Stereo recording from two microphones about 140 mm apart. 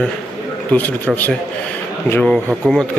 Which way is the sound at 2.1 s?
10° left (ahead or behind).